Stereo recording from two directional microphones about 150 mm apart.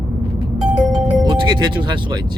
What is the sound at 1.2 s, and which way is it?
Speech, 30° right (ahead or behind).